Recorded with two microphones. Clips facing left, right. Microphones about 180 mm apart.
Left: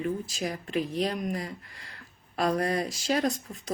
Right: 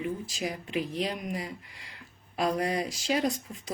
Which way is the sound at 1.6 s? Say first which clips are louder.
Left 1 dB; 45° left (ahead or behind).